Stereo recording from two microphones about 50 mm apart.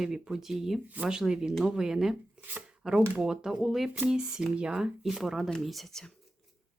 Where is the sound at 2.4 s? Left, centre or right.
Right.